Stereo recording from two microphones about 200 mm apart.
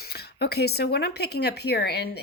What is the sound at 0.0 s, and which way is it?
Speech, 50° left (ahead or behind).